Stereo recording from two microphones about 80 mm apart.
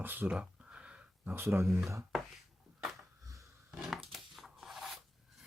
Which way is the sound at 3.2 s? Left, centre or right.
Right.